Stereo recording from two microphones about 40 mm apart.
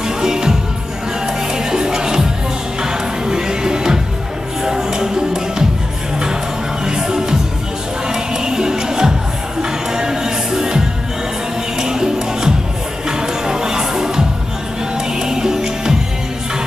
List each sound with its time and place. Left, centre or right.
0.2 s music: centre
6.8 s music: centre
11.8 s music: centre